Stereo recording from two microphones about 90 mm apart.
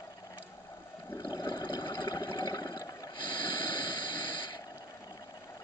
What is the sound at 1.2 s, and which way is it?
Water, 45° left (ahead or behind).